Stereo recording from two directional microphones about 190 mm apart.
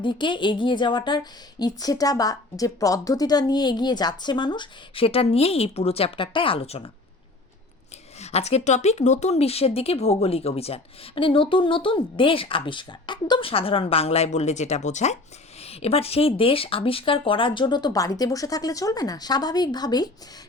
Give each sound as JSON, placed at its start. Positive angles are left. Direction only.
{"t": 0.0, "sound": "speech", "side_deg": 25}
{"t": 8.2, "sound": "speech", "side_deg": 35}